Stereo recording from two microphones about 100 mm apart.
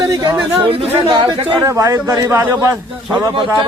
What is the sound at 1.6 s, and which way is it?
Speech, 35° right (ahead or behind).